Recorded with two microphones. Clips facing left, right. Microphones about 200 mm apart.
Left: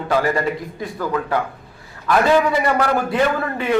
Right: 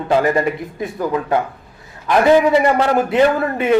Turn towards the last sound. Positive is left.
turn(degrees=-20)  # may be behind; listen again after turning